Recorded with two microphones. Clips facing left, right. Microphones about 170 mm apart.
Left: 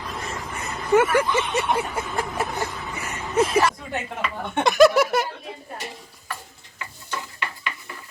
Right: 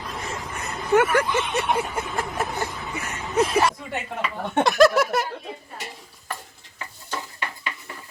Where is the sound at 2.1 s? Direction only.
Centre (ahead or behind).